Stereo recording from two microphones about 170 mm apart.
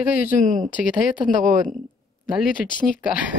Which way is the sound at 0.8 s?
55° left (ahead or behind).